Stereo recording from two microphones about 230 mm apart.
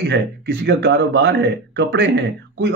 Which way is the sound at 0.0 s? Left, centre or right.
Right.